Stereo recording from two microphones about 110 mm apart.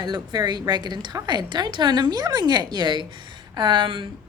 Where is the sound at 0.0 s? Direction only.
40° right (ahead or behind).